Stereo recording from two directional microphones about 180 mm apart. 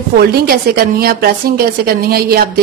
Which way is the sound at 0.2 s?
60° right (ahead or behind).